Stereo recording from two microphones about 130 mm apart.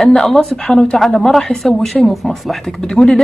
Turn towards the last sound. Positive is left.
turn(degrees=5)  # may be behind; listen again after turning